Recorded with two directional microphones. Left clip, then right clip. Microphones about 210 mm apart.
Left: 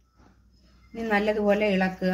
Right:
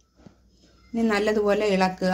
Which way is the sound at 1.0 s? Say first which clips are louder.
Right 1 dB; 30° right (ahead or behind).